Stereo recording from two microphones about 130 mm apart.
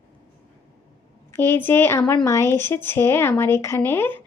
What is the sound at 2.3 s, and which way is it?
A woman's voice, 20° left (ahead or behind).